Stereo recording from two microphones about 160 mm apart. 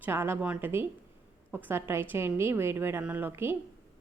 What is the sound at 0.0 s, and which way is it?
A woman's voice, 15° right (ahead or behind).